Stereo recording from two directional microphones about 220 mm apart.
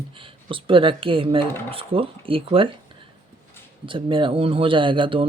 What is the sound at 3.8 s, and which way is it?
Speech, 25° right (ahead or behind).